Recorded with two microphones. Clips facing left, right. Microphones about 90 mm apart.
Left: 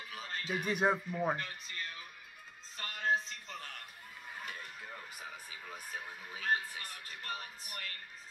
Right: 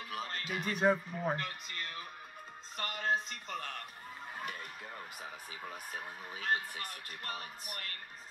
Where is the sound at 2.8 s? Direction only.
50° right (ahead or behind).